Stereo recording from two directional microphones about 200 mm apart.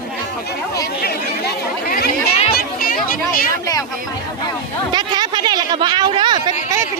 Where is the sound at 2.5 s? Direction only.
45° left (ahead or behind).